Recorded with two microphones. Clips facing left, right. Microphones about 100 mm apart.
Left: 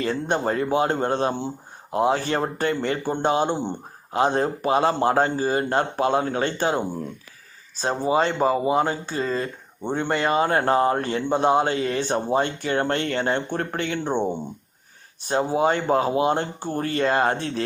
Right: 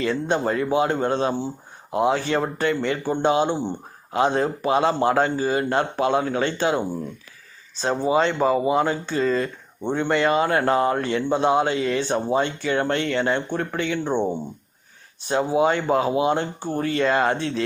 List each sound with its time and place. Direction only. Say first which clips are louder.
0.0 s speech: right 1 dB; 45° left (ahead or behind)
2.0 s speech: right 1 dB; 35° left (ahead or behind)
8.0 s speech: right 1 dB; 35° left (ahead or behind); by 14.1 s 50° left (ahead or behind)
14.1 s speech: even; 15° left (ahead or behind)
15.5 s speech: right 1 dB; 40° left (ahead or behind)
17.3 s speech: right 2 dB; 50° left (ahead or behind)